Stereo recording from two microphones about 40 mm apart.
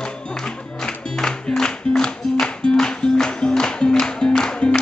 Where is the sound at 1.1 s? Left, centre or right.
Centre.